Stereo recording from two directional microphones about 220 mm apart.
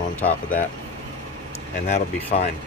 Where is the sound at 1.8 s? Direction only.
30° left (ahead or behind).